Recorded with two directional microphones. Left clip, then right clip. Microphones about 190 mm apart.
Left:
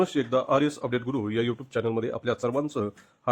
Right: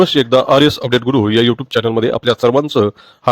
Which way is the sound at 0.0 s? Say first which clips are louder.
Right 14 dB; 40° right (ahead or behind).